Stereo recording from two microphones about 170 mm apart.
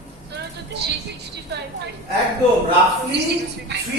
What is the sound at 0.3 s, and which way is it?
Vehicle, 85° right.